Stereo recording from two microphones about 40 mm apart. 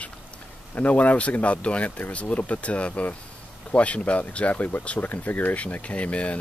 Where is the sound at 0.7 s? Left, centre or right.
Left.